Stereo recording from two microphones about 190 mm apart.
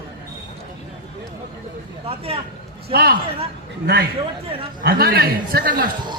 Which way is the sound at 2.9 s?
55° right (ahead or behind).